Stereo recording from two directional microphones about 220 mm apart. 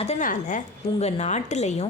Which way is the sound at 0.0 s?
35° left (ahead or behind).